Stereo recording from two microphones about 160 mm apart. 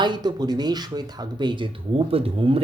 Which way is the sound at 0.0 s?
25° right (ahead or behind).